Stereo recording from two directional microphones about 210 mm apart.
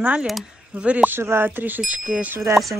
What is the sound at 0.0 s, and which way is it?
Speech, 5° right (ahead or behind).